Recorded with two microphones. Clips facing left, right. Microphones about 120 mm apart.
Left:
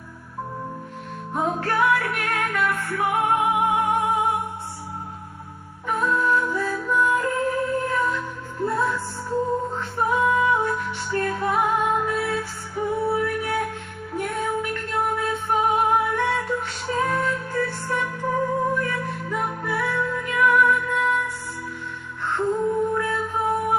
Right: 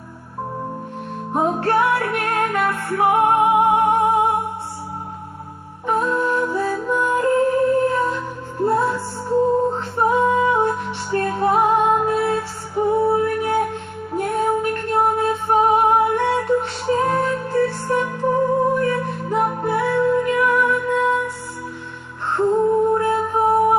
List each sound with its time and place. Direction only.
1.3 s music: 30° right (ahead or behind)
5.9 s music: 30° right (ahead or behind)
22.3 s music: 30° right (ahead or behind)